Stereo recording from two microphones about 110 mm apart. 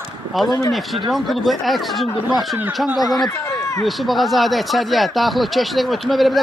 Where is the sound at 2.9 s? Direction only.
35° left (ahead or behind).